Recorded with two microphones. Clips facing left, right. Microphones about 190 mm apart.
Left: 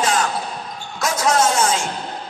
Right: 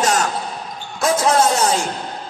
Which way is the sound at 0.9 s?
30° right (ahead or behind).